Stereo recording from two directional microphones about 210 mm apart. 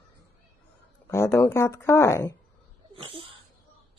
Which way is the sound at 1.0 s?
10° left (ahead or behind).